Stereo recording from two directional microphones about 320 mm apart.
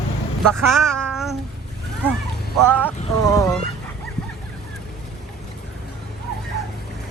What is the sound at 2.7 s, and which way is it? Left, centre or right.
Vehicle, centre.